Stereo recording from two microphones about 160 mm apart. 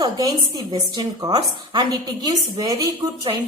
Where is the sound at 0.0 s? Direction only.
25° right (ahead or behind).